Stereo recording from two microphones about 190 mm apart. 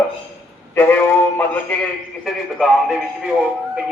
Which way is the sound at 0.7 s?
10° left (ahead or behind).